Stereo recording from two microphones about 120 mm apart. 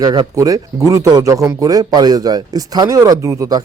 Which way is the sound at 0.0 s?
35° right (ahead or behind).